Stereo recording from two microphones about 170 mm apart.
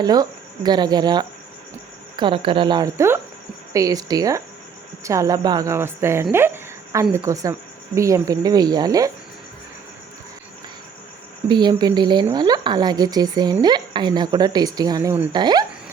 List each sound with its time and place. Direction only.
0.0 s speech: 25° right (ahead or behind)
11.4 s speech: 25° right (ahead or behind)